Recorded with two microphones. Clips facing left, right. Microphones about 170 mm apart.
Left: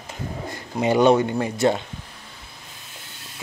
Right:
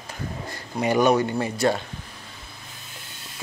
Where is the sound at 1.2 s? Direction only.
15° left (ahead or behind).